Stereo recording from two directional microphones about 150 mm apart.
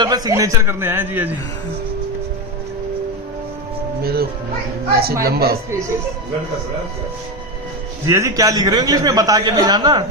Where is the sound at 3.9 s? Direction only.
90° right.